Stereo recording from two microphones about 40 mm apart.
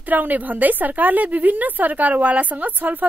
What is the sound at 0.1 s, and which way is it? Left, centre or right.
A woman's voice, right.